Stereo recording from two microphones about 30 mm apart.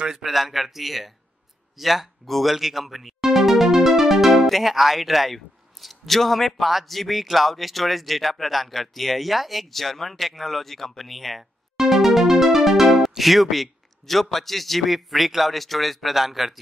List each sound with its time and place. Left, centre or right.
0.1 s speech: centre
3.3 s music: centre
4.0 s speech: centre
9.7 s speech: centre
11.7 s music: centre
14.3 s speech: centre